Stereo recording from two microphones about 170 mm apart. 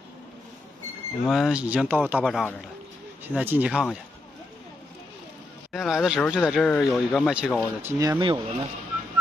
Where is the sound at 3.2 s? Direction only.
10° right (ahead or behind).